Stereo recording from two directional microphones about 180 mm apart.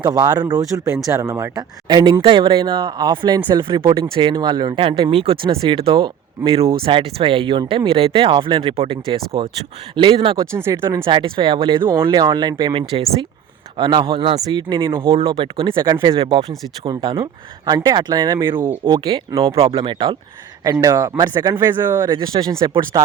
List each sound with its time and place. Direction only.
0.0 s speech: 20° right (ahead or behind)
11.0 s speech: 30° right (ahead or behind)
11.8 s speech: 15° right (ahead or behind)
18.9 s speech: 25° right (ahead or behind)